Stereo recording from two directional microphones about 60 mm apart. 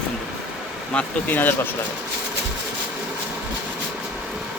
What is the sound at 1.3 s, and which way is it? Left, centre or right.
Speech, left.